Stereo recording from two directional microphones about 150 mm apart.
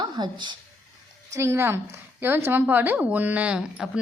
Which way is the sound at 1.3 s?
15° right (ahead or behind).